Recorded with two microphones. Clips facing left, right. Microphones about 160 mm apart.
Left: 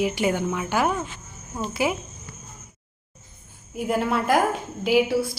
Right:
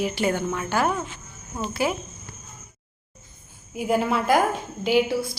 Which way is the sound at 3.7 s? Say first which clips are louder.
Right 1 dB; centre (ahead or behind).